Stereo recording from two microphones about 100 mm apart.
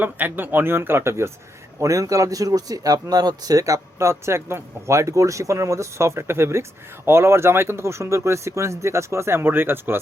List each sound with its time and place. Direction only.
0.0 s speech: 20° right (ahead or behind)